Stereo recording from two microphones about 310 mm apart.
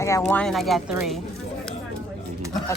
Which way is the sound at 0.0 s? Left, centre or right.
Centre.